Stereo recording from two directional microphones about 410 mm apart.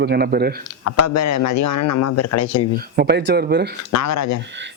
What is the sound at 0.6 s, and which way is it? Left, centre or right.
Speech, left.